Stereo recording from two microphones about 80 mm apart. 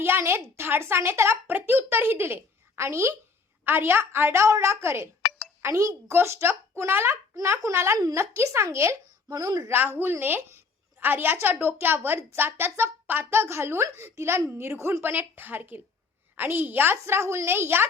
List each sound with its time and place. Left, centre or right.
0.0 s a woman's voice: right
9.3 s a woman's voice: right
9.6 s a woman's voice: right